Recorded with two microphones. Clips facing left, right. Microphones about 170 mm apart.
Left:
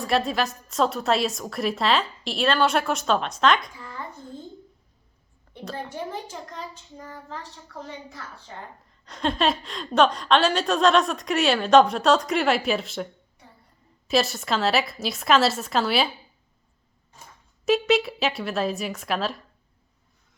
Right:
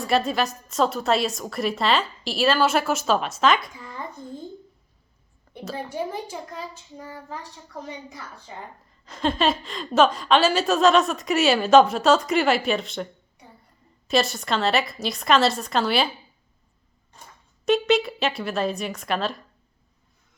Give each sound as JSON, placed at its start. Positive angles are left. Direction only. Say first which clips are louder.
{"t": 0.0, "sound": "a woman's voice", "louder": "right 1 dB", "side_deg": 0}
{"t": 3.8, "sound": "a sound", "louder": "right 2 dB", "side_deg": -15}
{"t": 5.5, "sound": "a child's voice", "louder": "right 3 dB", "side_deg": -10}
{"t": 9.0, "sound": "a woman's voice", "louder": "right 1 dB", "side_deg": 0}
{"t": 14.1, "sound": "a woman's voice", "louder": "even", "side_deg": 0}
{"t": 17.7, "sound": "a woman's voice", "louder": "right 1 dB", "side_deg": 0}